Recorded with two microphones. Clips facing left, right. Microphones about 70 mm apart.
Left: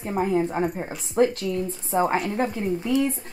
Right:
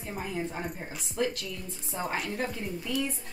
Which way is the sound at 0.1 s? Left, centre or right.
Left.